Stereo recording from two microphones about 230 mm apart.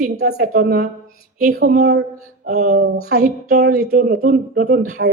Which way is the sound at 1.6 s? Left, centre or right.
Right.